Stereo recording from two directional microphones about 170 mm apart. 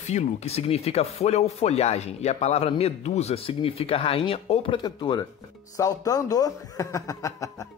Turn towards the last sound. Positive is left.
turn(degrees=20)  # may be behind; listen again after turning